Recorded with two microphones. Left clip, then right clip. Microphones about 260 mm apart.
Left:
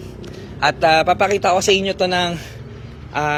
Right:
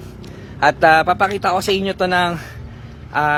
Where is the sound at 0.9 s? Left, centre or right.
Centre.